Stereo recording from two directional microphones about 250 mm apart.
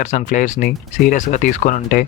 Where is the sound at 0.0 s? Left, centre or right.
Left.